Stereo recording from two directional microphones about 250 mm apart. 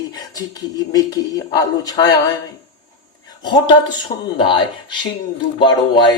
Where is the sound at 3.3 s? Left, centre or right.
Centre.